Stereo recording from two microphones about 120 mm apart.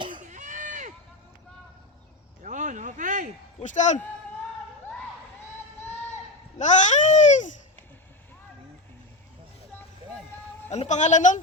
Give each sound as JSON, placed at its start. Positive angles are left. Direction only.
{"t": 0.2, "sound": "run", "side_deg": -90}
{"t": 2.4, "sound": "a sound", "side_deg": -90}
{"t": 3.6, "sound": "speech", "side_deg": 85}
{"t": 6.6, "sound": "babbling", "side_deg": 85}
{"t": 10.7, "sound": "speech", "side_deg": 75}